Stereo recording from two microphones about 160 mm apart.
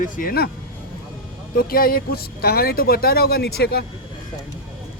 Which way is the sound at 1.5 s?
65° left (ahead or behind).